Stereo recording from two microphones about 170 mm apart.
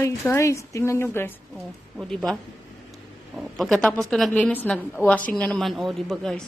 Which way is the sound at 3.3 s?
Centre (ahead or behind).